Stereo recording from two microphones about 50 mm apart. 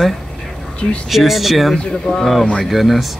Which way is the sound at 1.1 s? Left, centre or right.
Centre.